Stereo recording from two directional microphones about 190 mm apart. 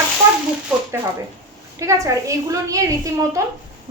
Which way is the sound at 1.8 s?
15° right (ahead or behind).